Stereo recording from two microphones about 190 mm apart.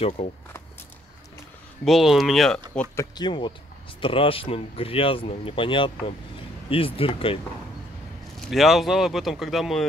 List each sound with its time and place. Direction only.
0.2 s speech: 40° left (ahead or behind)
1.9 s speech: centre (ahead or behind)
3.2 s speech: 25° left (ahead or behind)
8.5 s speech: centre (ahead or behind)